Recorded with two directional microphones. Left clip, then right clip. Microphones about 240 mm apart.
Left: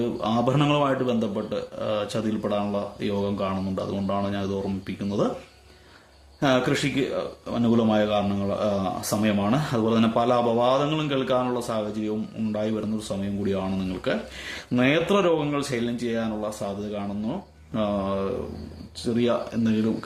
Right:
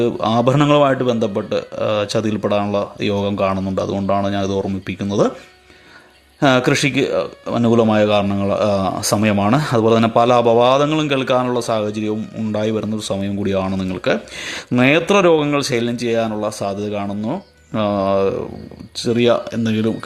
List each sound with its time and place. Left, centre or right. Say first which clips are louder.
0.0 s speech: right 9 dB; right
6.4 s speech: right 8 dB; right